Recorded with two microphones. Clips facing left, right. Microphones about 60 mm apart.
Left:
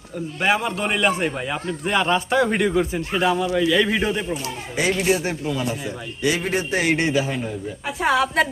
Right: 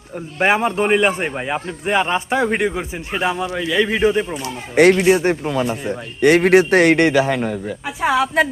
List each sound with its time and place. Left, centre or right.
0.3 s speech: right
4.7 s a man's voice: right
4.9 s a man's voice: right
8.0 s a woman's voice: centre